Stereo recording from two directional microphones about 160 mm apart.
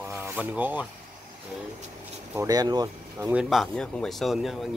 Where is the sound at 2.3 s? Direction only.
20° right (ahead or behind).